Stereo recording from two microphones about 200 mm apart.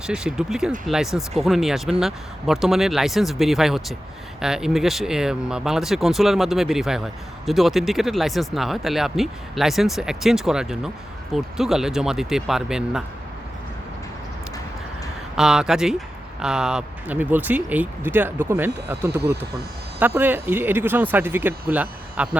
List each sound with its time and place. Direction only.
0.1 s speech: 5° right (ahead or behind)
15.4 s speech: 5° right (ahead or behind)